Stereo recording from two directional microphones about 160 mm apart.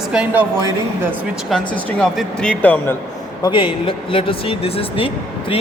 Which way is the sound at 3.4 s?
30° left (ahead or behind).